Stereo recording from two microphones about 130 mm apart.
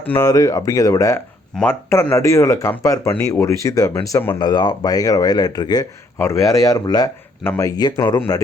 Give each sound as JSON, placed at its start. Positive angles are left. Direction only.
{"t": 0.2, "sound": "speech", "side_deg": 25}
{"t": 4.4, "sound": "speech", "side_deg": 35}